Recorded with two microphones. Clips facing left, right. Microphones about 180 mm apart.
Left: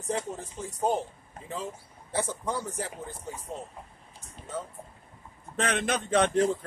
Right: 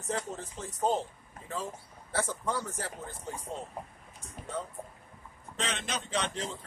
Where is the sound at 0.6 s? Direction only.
10° left (ahead or behind).